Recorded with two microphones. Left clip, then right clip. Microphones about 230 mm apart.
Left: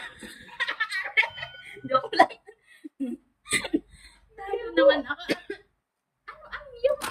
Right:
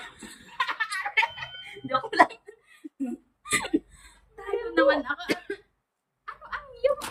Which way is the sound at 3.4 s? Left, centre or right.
Centre.